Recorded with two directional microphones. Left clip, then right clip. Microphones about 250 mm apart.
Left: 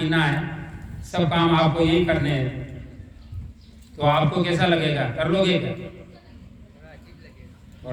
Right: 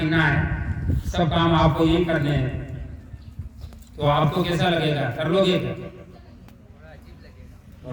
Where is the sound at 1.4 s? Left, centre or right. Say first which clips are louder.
Even; right.